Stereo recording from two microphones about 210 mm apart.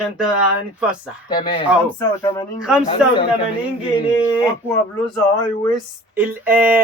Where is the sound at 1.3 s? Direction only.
20° left (ahead or behind).